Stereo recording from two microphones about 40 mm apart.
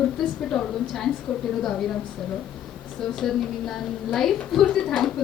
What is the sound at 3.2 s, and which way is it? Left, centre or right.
A woman's voice, centre.